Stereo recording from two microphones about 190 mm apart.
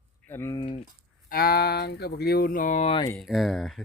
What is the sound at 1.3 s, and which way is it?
Speech, 55° left (ahead or behind).